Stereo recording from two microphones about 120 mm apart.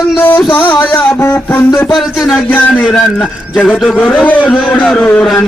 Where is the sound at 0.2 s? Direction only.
15° left (ahead or behind).